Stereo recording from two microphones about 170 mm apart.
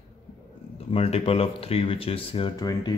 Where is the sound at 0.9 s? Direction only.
35° left (ahead or behind).